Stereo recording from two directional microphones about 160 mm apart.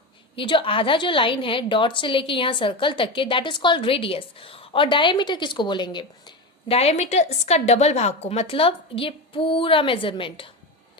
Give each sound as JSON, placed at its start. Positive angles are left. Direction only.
{"t": 0.3, "sound": "a woman's voice", "side_deg": 30}
{"t": 6.7, "sound": "a woman's voice", "side_deg": 40}